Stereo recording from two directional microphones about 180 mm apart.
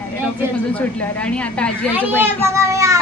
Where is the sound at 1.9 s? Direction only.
10° right (ahead or behind).